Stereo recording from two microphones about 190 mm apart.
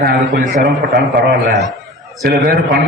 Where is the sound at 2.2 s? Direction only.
55° right (ahead or behind).